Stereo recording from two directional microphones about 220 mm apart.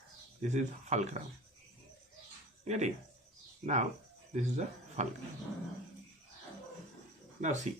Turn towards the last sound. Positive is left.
turn(degrees=-35)  # may be behind; listen again after turning